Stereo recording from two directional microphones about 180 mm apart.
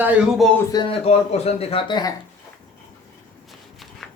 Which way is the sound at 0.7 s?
30° left (ahead or behind).